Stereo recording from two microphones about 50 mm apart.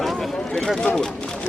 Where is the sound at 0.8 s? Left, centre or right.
Centre.